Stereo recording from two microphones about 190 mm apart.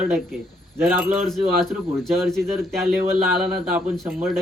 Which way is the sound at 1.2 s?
Centre (ahead or behind).